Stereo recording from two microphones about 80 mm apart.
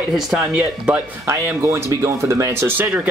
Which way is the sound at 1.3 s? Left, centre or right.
Right.